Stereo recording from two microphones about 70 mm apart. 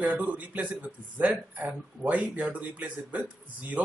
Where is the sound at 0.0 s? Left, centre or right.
Right.